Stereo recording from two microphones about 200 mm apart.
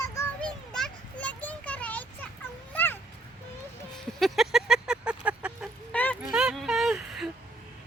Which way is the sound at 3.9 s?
Centre (ahead or behind).